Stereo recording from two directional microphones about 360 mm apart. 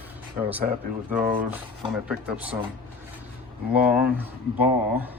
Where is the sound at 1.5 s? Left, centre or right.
Centre.